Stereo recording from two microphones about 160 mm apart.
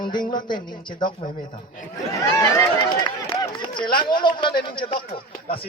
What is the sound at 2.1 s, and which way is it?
A man's voice, 20° left (ahead or behind).